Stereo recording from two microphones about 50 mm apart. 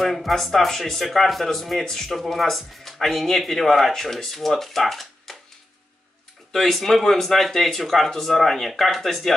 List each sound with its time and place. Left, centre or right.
0.0 s speech: centre
6.5 s speech: centre